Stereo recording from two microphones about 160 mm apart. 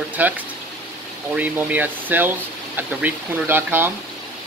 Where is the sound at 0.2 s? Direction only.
10° right (ahead or behind).